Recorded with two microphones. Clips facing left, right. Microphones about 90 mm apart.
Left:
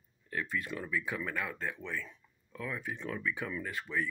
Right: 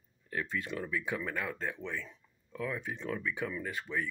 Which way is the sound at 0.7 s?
40° right (ahead or behind).